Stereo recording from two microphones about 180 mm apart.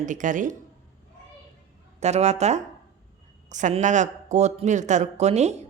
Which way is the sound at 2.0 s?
40° right (ahead or behind).